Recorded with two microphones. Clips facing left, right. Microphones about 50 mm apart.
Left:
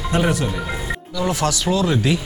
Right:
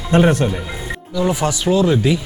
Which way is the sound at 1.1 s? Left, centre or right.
Centre.